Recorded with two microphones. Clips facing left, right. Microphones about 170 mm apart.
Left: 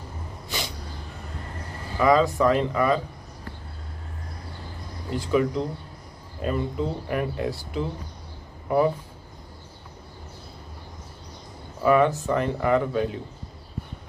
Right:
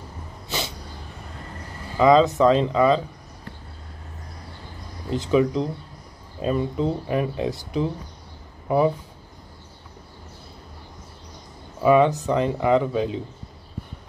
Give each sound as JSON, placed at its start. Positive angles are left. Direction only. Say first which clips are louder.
{"t": 2.0, "sound": "speech", "louder": "right 4 dB", "side_deg": -20}
{"t": 5.1, "sound": "speech", "louder": "right 3 dB", "side_deg": -20}
{"t": 11.8, "sound": "speech", "louder": "right 3 dB", "side_deg": -20}